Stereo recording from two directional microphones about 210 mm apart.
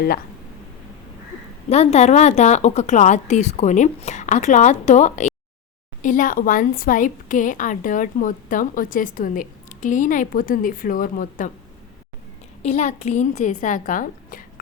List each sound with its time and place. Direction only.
1.7 s a woman's voice: 30° left (ahead or behind)
12.6 s a woman's voice: 30° left (ahead or behind)